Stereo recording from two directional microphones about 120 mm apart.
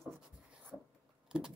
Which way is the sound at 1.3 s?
5° right (ahead or behind).